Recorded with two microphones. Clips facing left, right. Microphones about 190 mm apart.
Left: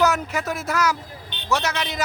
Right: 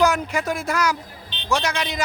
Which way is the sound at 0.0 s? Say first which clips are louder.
Right 1 dB; 5° left (ahead or behind).